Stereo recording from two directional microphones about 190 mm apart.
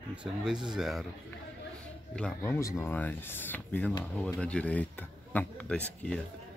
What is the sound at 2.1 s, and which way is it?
Speech, 5° left (ahead or behind).